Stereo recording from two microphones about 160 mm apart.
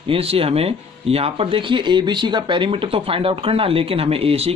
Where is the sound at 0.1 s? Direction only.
35° right (ahead or behind).